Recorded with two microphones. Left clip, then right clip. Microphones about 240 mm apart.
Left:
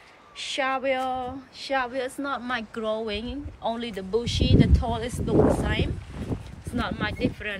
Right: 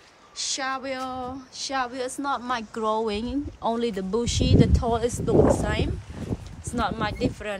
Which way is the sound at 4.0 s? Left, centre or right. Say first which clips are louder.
Even; right.